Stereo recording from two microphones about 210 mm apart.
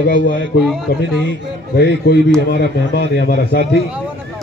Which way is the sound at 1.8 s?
50° left (ahead or behind).